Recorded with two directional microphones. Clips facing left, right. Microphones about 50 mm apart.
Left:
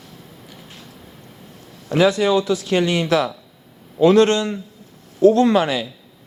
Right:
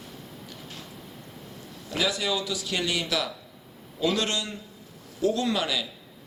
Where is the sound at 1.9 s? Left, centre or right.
Left.